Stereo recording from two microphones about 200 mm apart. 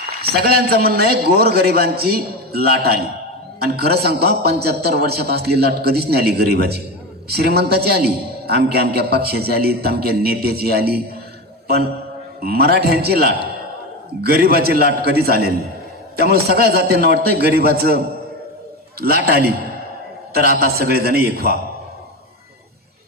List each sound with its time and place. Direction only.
0.2 s a man's voice: 50° right (ahead or behind)